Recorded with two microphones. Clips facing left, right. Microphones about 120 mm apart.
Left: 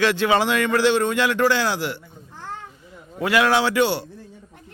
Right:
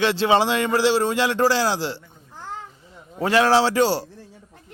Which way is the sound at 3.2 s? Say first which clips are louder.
Right 2 dB; 30° right (ahead or behind).